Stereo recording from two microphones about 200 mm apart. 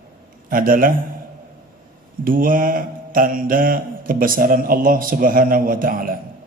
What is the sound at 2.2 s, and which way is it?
Mantra, 45° right (ahead or behind).